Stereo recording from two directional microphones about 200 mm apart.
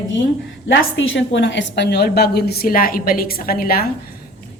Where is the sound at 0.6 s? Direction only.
70° left (ahead or behind).